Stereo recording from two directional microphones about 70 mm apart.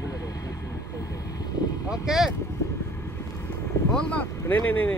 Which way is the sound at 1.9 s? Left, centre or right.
Centre.